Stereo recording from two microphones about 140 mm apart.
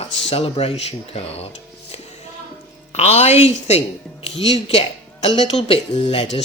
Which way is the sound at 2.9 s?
50° left (ahead or behind).